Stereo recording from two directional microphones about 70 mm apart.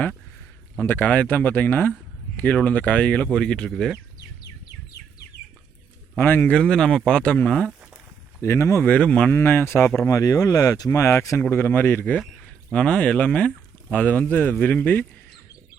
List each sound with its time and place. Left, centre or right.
0.8 s speech: left; by 3.7 s centre
3.7 s speech: centre
6.1 s speech: left
6.6 s speech: centre
8.4 s speech: left
8.8 s speech: left
9.3 s speech: left
10.1 s speech: left
10.9 s speech: left
11.4 s speech: left
12.5 s speech: centre